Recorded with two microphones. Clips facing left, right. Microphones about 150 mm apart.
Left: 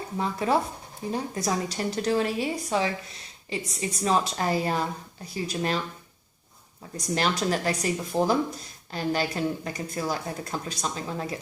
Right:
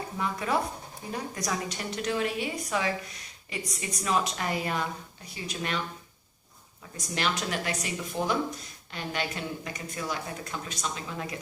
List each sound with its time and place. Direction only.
0.2 s speech: 30° left (ahead or behind)
6.9 s speech: 40° left (ahead or behind)